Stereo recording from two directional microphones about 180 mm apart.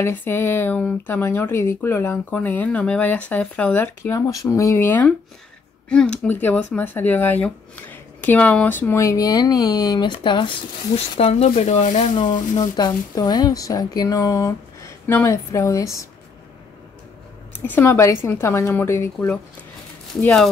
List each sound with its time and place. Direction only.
0.0 s speech: 10° left (ahead or behind); by 12.1 s 40° left (ahead or behind)
12.2 s speech: 25° left (ahead or behind)
17.6 s speech: 10° left (ahead or behind)
20.2 s speech: 5° left (ahead or behind)